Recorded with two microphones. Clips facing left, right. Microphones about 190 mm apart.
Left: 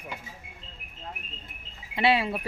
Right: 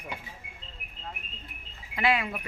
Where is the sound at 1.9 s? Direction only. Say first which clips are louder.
Left 3 dB; 30° left (ahead or behind).